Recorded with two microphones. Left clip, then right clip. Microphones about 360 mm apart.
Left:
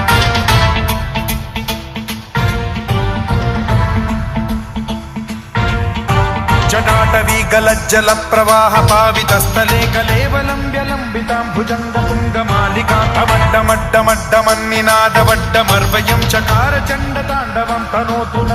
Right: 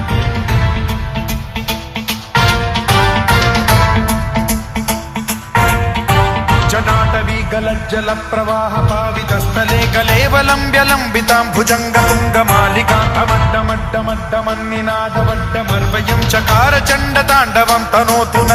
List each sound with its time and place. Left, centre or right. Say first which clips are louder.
0.1 s music: left 8 dB; left
2.3 s music: right 6 dB; centre; by 4.4 s right
5.5 s music: right 5 dB; right
6.1 s music: right 1 dB; centre; by 7.6 s left
7.9 s music: left 6 dB; left
8.9 s music: left 7 dB; left
9.6 s music: left 1 dB; centre; by 10.9 s right
11.1 s music: right 5 dB; right
12.0 s music: right 5 dB; right; by 14.0 s centre
14.3 s music: left 5 dB; left
15.5 s music: left 5 dB; centre
17.6 s music: right 5 dB; right